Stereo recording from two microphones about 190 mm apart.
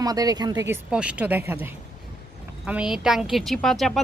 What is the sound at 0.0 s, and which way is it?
Speech, 20° right (ahead or behind).